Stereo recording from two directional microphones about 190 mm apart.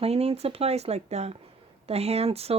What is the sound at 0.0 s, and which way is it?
Speech, 30° right (ahead or behind).